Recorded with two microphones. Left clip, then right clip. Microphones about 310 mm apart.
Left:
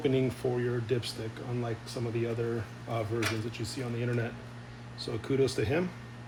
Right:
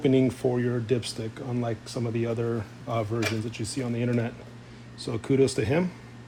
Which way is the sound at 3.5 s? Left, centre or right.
Right.